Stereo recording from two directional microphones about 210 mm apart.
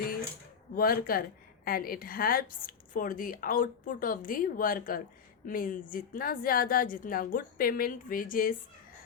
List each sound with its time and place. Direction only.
0.8 s a woman's voice: 45° left (ahead or behind)